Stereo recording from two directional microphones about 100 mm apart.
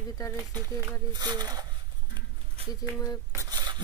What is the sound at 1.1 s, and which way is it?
Speech, 45° right (ahead or behind).